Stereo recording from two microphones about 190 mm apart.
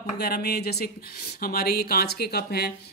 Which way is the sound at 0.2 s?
60° left (ahead or behind).